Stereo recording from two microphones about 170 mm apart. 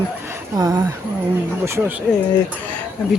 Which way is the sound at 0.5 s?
20° right (ahead or behind).